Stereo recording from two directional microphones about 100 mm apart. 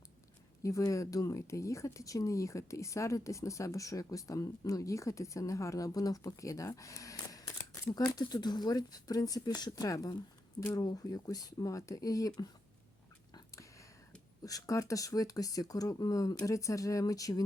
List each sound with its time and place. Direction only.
0.6 s speech: 35° left (ahead or behind)
13.3 s a sound: 30° left (ahead or behind)
14.4 s speech: 35° left (ahead or behind)